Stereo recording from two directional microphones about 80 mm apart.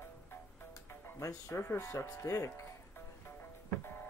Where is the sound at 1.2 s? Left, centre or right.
Left.